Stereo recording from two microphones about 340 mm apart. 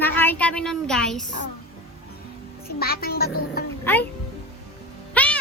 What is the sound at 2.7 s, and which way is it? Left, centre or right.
Speech, left.